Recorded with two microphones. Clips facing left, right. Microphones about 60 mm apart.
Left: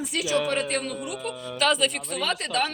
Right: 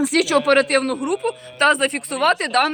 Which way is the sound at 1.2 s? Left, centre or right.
Right.